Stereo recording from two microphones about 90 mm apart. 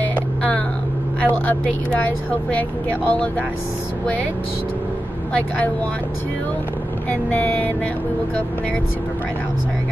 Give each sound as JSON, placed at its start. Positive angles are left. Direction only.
{"t": 0.0, "sound": "music", "side_deg": 15}
{"t": 1.2, "sound": "speech", "side_deg": 20}
{"t": 7.1, "sound": "speech", "side_deg": 20}